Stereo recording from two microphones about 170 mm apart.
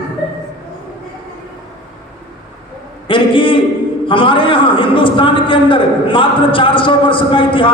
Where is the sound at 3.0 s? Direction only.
30° left (ahead or behind).